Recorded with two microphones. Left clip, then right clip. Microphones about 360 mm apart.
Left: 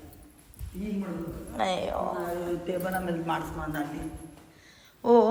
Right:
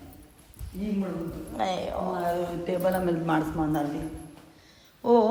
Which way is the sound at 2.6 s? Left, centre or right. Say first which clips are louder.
Right 5 dB; right.